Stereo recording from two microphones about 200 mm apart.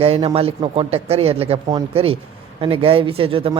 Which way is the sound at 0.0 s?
30° right (ahead or behind).